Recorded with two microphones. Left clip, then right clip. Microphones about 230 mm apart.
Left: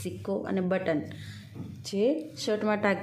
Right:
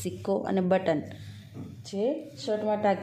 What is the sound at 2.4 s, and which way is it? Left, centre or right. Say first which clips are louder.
Speech: even; centre.